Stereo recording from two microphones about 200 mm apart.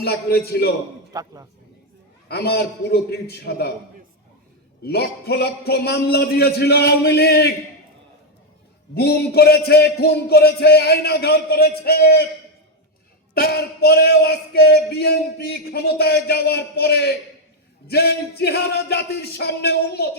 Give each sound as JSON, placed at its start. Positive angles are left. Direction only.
{"t": 0.0, "sound": "speech", "side_deg": 50}
{"t": 1.1, "sound": "speech", "side_deg": -15}
{"t": 2.3, "sound": "speech", "side_deg": 55}
{"t": 4.8, "sound": "speech", "side_deg": 55}
{"t": 9.0, "sound": "speech", "side_deg": 55}
{"t": 13.3, "sound": "speech", "side_deg": 50}